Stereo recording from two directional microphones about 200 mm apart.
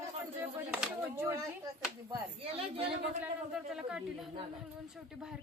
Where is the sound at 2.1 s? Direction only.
30° right (ahead or behind).